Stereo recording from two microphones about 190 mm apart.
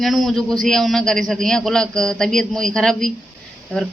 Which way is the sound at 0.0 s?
Centre (ahead or behind).